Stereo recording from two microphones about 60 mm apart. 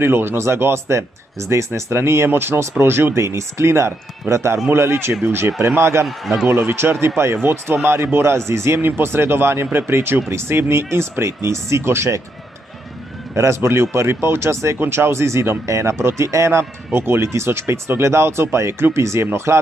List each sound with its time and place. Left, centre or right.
0.0 s a man's voice: right
5.8 s a man's voice: right
6.0 s speech: centre
6.4 s a man's voice: right
13.3 s a man's voice: right